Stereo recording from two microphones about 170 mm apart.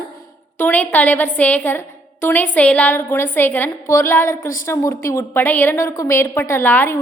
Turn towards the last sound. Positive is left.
turn(degrees=15)  # may be behind; listen again after turning